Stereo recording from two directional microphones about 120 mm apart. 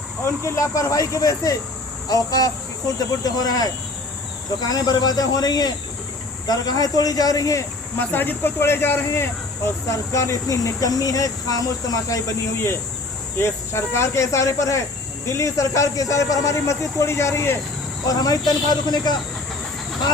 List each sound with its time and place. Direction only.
0.3 s speech: 25° left (ahead or behind)
7.9 s speech: 15° left (ahead or behind)
13.4 s speech: 20° left (ahead or behind)